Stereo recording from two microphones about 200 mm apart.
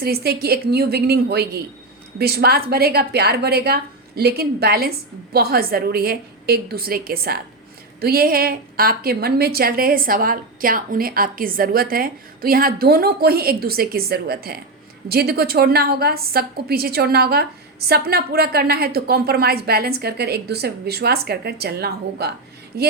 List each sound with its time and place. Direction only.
0.0 s a woman's voice: 50° right (ahead or behind)